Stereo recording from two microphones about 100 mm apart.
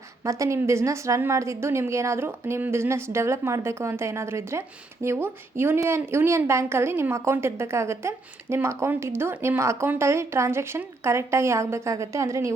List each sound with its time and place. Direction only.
0.3 s a woman's voice: 30° right (ahead or behind)